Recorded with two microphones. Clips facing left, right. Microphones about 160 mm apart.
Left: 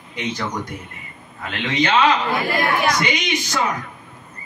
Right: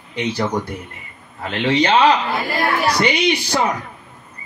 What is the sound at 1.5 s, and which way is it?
Speech, 35° right (ahead or behind).